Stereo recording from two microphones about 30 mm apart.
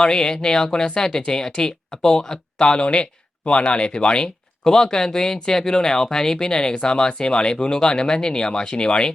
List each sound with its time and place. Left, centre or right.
0.0 s speech: left